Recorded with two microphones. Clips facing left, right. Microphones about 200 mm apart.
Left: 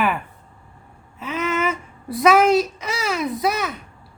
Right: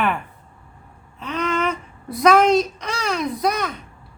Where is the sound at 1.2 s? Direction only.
5° left (ahead or behind).